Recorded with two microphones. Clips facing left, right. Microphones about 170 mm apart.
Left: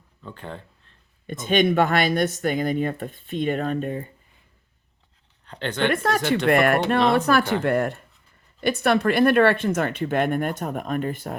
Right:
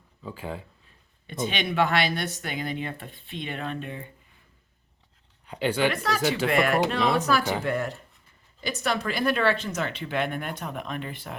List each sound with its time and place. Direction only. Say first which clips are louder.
0.2 s speech: right 2 dB; 5° right (ahead or behind)
1.3 s speech: left 9 dB; 45° left (ahead or behind)
5.5 s speech: even; 10° right (ahead or behind)
5.9 s speech: left 6 dB; 50° left (ahead or behind)
6.2 s speech: even; 5° right (ahead or behind)
6.5 s speech: left 6 dB; 55° left (ahead or behind)